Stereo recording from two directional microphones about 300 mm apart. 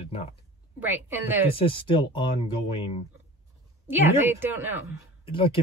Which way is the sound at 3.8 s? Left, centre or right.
Centre.